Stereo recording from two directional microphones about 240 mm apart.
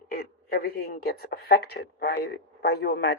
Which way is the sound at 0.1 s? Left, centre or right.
Left.